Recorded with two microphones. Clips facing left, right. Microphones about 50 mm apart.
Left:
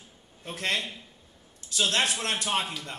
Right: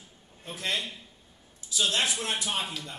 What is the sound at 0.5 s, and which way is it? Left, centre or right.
A man's voice, left.